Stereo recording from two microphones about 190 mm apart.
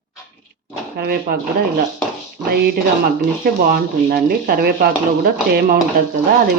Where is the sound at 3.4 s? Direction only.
50° right (ahead or behind).